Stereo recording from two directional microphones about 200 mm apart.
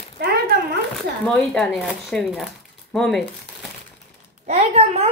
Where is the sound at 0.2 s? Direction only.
55° right (ahead or behind).